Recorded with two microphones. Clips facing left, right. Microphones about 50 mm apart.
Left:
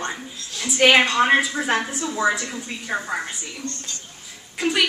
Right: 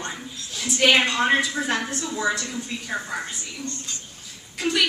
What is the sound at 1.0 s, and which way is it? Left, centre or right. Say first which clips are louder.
A woman's voice: left 3 dB; left.